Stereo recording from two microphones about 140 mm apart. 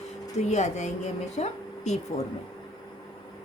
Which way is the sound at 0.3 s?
55° left (ahead or behind).